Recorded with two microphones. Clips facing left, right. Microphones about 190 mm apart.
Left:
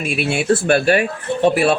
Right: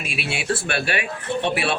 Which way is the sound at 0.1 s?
50° left (ahead or behind).